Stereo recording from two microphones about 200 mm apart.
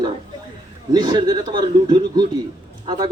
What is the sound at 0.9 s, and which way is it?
A man's voice, 20° right (ahead or behind).